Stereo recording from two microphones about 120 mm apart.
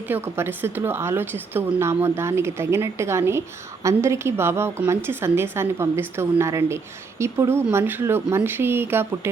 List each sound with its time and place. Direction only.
0.1 s a woman's voice: 20° right (ahead or behind)